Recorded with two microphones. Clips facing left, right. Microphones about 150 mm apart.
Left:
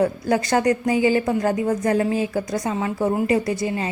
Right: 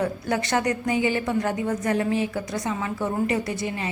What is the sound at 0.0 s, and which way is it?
A woman's voice, 35° left (ahead or behind).